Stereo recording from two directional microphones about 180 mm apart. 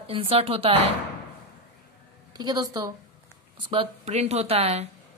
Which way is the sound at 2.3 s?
20° right (ahead or behind).